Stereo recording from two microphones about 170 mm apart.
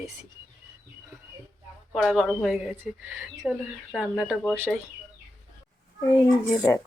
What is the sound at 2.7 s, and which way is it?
Speech, 15° right (ahead or behind).